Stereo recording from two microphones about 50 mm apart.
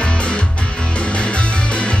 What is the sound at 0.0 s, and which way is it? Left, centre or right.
Music, left.